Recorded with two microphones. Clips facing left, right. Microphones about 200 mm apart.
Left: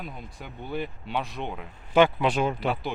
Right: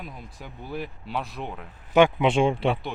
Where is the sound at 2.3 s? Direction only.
25° right (ahead or behind).